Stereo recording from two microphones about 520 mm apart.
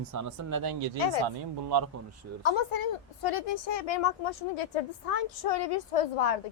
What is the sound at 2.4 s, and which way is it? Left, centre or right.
Child singing, left.